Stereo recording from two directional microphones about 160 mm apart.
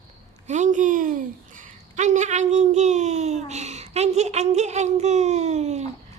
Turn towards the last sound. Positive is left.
turn(degrees=-45)  # may be behind; listen again after turning